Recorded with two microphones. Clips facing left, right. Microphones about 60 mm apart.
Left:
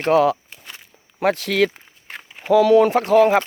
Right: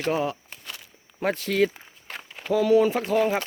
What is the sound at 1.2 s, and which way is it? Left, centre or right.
Speech, left.